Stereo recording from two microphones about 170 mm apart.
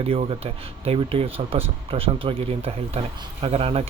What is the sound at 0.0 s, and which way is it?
Speech, 35° right (ahead or behind).